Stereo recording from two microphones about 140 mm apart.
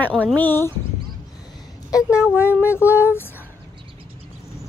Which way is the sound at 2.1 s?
20° left (ahead or behind).